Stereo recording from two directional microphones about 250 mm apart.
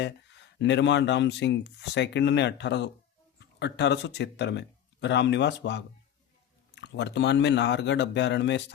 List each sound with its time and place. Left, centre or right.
0.0 s speech: left